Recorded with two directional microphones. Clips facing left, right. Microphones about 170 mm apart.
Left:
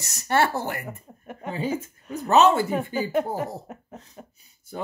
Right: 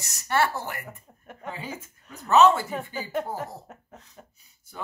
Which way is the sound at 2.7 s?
10° left (ahead or behind).